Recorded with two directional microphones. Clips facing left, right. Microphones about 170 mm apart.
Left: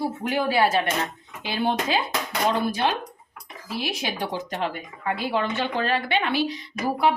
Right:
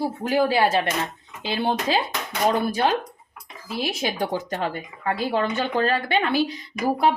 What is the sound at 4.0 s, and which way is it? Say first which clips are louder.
A woman's voice: right 3 dB; 45° right (ahead or behind).